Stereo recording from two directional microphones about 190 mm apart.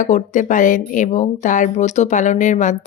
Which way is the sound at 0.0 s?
40° left (ahead or behind).